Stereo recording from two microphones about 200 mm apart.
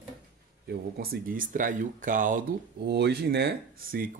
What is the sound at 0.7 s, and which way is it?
Speech, 50° right (ahead or behind).